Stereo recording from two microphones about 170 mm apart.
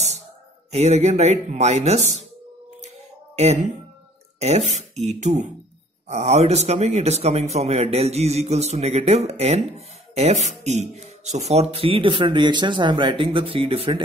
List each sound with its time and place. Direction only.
0.7 s a man's voice: 40° right (ahead or behind)
3.4 s a man's voice: 40° right (ahead or behind)